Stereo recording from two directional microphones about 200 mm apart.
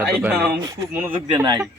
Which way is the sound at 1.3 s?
20° right (ahead or behind).